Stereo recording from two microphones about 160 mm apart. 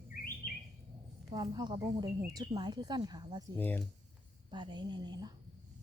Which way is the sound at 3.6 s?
10° left (ahead or behind).